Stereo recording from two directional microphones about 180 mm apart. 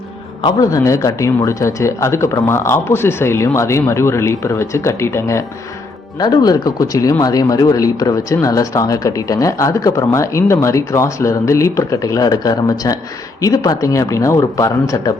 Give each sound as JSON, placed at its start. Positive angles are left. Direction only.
{"t": 0.4, "sound": "speech", "side_deg": 20}